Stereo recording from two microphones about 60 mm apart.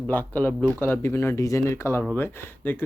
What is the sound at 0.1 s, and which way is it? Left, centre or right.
Speech, left.